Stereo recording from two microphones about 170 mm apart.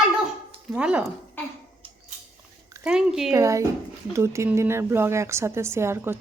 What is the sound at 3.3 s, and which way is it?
A woman's voice, 20° right (ahead or behind).